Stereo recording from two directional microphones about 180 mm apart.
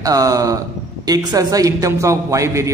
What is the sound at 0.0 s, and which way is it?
A man's voice, 20° right (ahead or behind).